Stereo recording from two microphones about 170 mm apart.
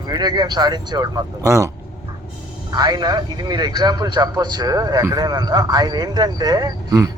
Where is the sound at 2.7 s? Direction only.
25° right (ahead or behind).